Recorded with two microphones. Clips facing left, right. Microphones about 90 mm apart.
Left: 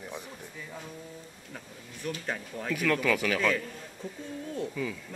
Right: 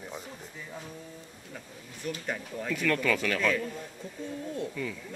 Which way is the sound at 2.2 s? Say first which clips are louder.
Even; 10° left (ahead or behind).